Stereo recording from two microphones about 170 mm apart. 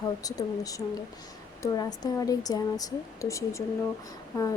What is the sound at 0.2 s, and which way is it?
Speech, 20° left (ahead or behind).